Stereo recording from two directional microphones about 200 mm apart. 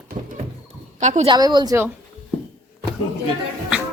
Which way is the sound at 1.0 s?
35° right (ahead or behind).